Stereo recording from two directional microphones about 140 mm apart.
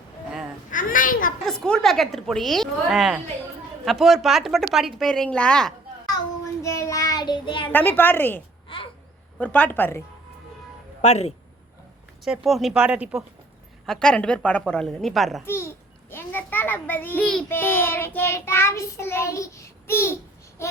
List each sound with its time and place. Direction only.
0.7 s babbling: 75° left (ahead or behind)
1.5 s a woman's voice: 5° left (ahead or behind)
6.6 s child singing: 20° left (ahead or behind); by 7.7 s 35° left (ahead or behind)
7.7 s child singing: 15° left (ahead or behind)
8.7 s a sound: 40° left (ahead or behind)
9.4 s child singing: 10° left (ahead or behind)
11.0 s speech: 50° left (ahead or behind)
12.2 s a woman's voice: centre (ahead or behind)
13.8 s child singing: 5° left (ahead or behind)
14.7 s a woman's voice: 5° left (ahead or behind)
15.4 s a sound: 15° left (ahead or behind)
17.5 s child singing: 15° left (ahead or behind)